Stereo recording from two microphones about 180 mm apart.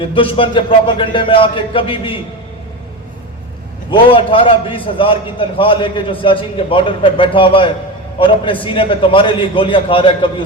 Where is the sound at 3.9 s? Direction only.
30° left (ahead or behind).